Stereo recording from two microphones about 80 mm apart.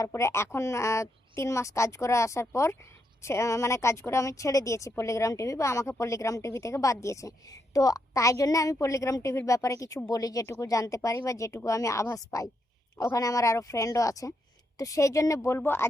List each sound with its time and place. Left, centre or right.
0.0 s a woman's voice: left
10.4 s a woman's voice: left